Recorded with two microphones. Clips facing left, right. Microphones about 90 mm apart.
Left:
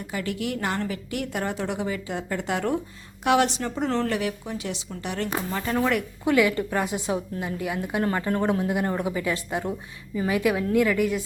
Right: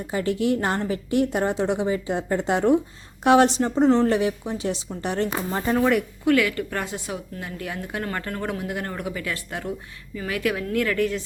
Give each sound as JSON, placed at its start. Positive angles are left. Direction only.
{"t": 0.1, "sound": "a woman's voice", "side_deg": -30}
{"t": 5.7, "sound": "speech", "side_deg": 0}
{"t": 6.2, "sound": "a woman's voice", "side_deg": 20}